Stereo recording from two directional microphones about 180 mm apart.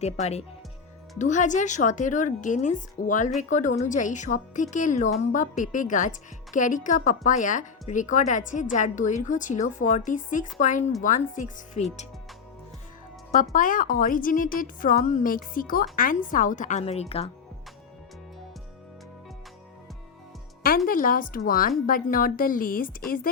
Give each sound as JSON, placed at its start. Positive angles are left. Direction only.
{"t": 0.0, "sound": "a woman's voice", "side_deg": 35}
{"t": 13.3, "sound": "a woman's voice", "side_deg": 45}
{"t": 20.7, "sound": "a woman's voice", "side_deg": 50}